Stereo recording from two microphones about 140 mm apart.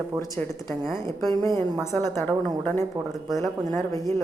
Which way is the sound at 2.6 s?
15° left (ahead or behind).